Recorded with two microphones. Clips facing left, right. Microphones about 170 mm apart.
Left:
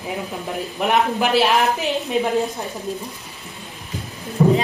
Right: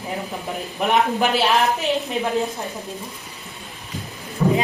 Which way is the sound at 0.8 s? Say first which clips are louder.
Even; centre (ahead or behind).